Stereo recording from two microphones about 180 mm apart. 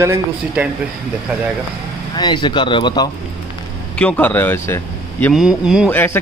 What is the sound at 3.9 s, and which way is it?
Speech, 5° left (ahead or behind).